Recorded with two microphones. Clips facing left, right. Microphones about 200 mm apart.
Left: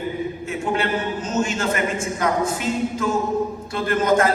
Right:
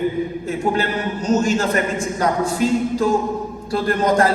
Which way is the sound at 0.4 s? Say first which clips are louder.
Right 2 dB; 35° right (ahead or behind).